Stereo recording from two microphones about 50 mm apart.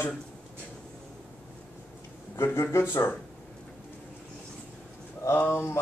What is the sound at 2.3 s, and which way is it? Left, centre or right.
Speech, left.